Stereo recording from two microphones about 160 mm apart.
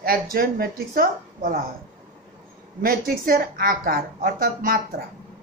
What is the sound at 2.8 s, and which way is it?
A woman's voice, 65° right (ahead or behind).